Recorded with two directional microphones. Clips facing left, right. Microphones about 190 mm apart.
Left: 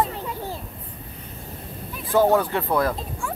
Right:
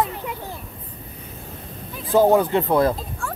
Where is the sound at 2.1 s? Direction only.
20° right (ahead or behind).